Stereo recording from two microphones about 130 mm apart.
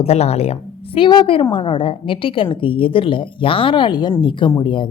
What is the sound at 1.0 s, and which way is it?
A woman's voice, 40° left (ahead or behind).